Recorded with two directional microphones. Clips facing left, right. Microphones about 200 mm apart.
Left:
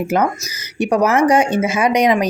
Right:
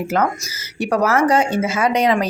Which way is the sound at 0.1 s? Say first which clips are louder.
Left 1 dB; 15° left (ahead or behind).